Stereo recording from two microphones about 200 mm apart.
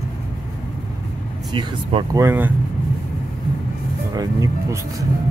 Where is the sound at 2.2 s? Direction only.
10° right (ahead or behind).